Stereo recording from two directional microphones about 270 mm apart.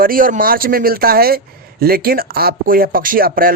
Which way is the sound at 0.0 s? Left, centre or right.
Right.